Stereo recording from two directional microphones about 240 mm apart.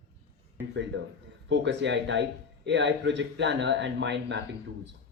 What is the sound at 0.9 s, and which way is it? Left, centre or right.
A man's voice, right.